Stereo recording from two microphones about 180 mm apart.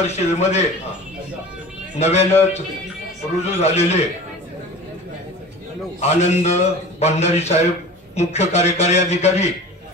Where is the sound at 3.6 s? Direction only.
35° left (ahead or behind).